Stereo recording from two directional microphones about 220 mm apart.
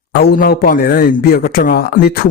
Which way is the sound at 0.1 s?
40° left (ahead or behind).